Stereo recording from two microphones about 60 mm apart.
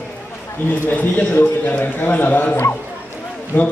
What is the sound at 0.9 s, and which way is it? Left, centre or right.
A man's voice, left.